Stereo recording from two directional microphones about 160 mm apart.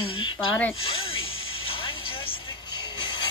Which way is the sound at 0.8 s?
35° left (ahead or behind).